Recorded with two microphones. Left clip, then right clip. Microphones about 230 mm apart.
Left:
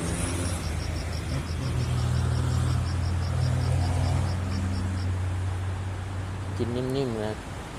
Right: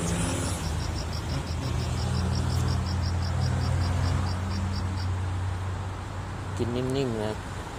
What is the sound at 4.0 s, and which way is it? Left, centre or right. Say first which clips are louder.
Vehicle: even; left.